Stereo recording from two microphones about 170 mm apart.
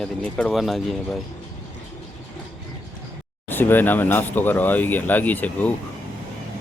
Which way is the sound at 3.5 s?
10° left (ahead or behind).